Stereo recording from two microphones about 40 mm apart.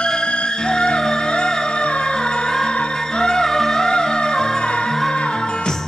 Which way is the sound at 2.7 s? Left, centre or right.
Left.